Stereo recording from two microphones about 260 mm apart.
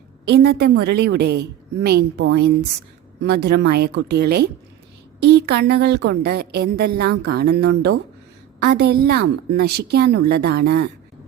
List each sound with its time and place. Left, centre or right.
0.3 s a woman's voice: right